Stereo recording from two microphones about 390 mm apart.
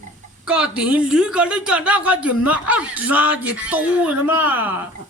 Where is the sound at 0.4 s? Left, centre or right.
Centre.